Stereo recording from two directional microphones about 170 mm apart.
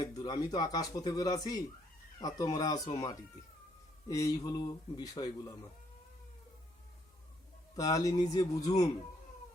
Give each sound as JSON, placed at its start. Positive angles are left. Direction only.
{"t": 0.0, "sound": "speech", "side_deg": 20}
{"t": 7.8, "sound": "speech", "side_deg": 20}